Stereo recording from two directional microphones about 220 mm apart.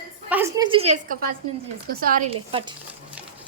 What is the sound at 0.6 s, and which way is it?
Speech, 25° right (ahead or behind).